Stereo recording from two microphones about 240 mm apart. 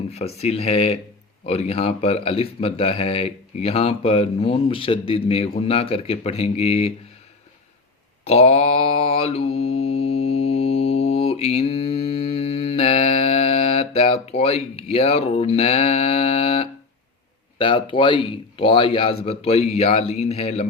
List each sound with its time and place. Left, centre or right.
0.1 s speech: left
8.3 s mantra: left
17.6 s speech: left